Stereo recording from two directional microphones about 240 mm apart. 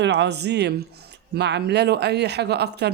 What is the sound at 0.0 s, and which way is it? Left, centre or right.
Speech, right.